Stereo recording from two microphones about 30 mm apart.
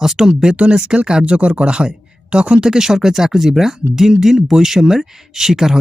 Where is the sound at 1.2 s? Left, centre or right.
Right.